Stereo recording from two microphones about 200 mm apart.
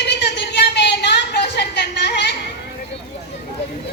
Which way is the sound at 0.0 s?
60° left (ahead or behind).